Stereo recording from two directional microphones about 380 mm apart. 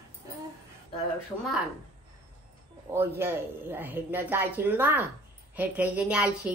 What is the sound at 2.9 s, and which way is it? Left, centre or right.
Speech, centre.